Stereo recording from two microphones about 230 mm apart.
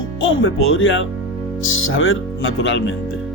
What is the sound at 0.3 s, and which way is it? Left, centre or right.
Speech, left.